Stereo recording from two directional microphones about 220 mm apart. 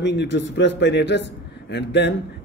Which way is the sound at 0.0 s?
50° left (ahead or behind).